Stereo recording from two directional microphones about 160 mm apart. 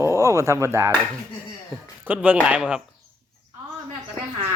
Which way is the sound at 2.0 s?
10° right (ahead or behind).